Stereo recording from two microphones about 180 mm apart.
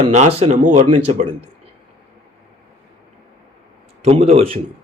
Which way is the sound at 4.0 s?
35° right (ahead or behind).